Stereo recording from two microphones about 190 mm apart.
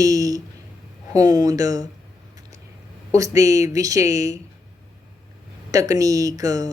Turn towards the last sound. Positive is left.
turn(degrees=-20)  # may be behind; listen again after turning